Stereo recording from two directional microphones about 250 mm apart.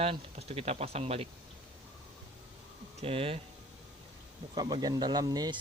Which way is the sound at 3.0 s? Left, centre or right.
Right.